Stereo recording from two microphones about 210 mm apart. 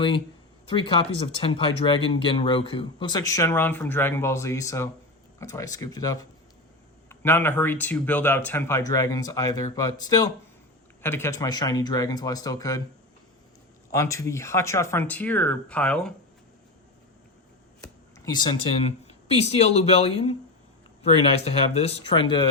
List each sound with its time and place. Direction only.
0.7 s speech: 25° left (ahead or behind)
13.9 s speech: 15° left (ahead or behind)
18.2 s speech: 20° left (ahead or behind)
18.9 s speech: 30° left (ahead or behind)